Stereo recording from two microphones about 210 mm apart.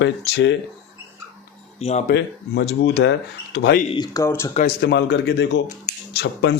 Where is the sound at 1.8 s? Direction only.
30° left (ahead or behind).